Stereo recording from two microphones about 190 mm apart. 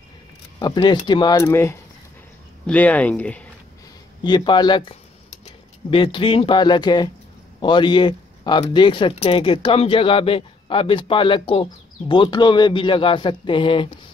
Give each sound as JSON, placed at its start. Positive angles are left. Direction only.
{"t": 0.6, "sound": "speech", "side_deg": 20}
{"t": 4.2, "sound": "speech", "side_deg": 25}